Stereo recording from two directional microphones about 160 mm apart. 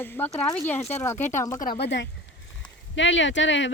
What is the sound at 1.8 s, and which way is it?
Speech, 90° left.